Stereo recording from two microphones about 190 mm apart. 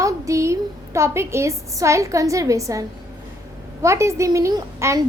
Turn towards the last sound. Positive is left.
turn(degrees=-15)  # may be behind; listen again after turning